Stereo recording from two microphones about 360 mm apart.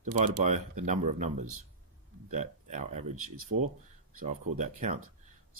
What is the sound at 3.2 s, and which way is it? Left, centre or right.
Speech, right.